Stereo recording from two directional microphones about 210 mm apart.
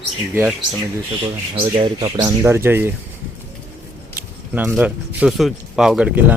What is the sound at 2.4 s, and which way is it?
Speech, 10° right (ahead or behind).